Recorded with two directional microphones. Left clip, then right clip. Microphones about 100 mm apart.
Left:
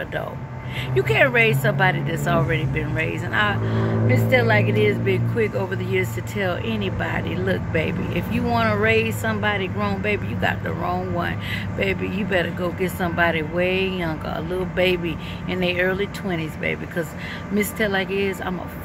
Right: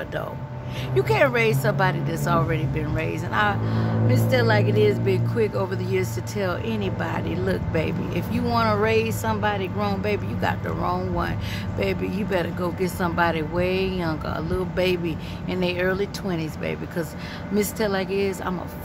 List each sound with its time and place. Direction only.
0.9 s speech: 25° right (ahead or behind)
17.6 s speech: 30° right (ahead or behind)